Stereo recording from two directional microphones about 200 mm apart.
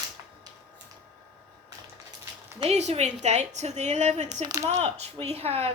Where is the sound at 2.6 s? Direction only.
35° right (ahead or behind).